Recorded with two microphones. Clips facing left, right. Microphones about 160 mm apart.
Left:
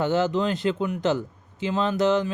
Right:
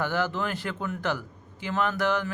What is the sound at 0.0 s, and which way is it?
Speech, 20° left (ahead or behind).